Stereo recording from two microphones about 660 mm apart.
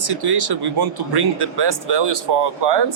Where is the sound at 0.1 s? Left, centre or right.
Right.